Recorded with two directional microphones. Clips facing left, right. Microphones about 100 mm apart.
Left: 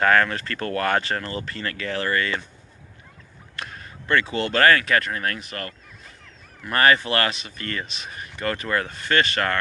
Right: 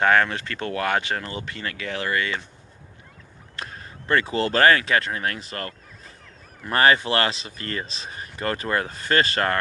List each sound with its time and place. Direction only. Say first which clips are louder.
0.0 s speech: even; 15° right (ahead or behind)
3.5 s a sound: even; 30° right (ahead or behind)
4.6 s speech: left 2 dB; 25° right (ahead or behind)